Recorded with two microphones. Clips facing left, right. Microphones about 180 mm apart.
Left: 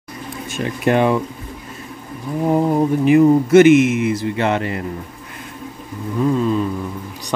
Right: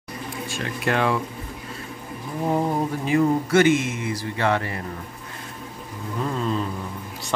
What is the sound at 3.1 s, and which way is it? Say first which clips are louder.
Speech: left 8 dB; 20° left (ahead or behind).